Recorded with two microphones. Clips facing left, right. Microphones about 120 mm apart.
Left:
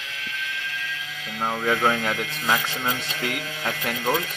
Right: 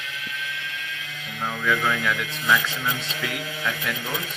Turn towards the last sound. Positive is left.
turn(degrees=40)  # may be behind; listen again after turning